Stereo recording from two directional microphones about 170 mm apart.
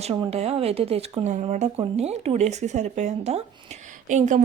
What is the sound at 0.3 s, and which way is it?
A woman's voice, 35° right (ahead or behind).